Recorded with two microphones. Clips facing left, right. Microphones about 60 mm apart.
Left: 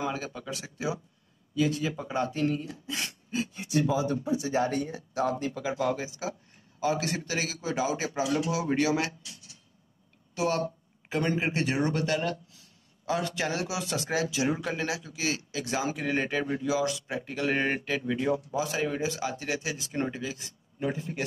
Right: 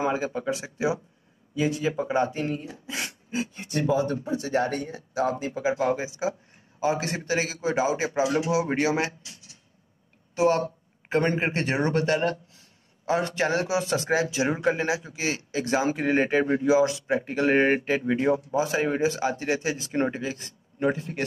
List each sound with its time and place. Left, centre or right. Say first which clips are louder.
0.0 s a man's voice: right 7 dB; right; by 3.6 s centre
4.6 s speech: even; centre
5.5 s a man's voice: right 4 dB; centre
10.3 s speech: right 6 dB; right